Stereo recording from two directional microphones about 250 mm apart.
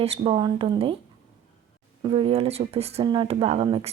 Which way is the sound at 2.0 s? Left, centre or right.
Right.